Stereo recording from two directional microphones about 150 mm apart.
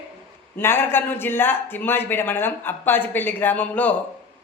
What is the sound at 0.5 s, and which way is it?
A man's voice, 15° left (ahead or behind).